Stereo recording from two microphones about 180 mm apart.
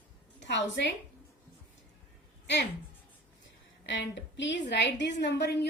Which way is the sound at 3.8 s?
85° left.